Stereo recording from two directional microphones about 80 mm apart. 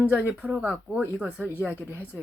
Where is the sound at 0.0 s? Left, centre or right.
Right.